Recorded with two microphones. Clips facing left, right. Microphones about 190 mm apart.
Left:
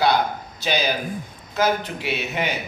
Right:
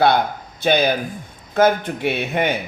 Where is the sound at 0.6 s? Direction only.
55° right (ahead or behind).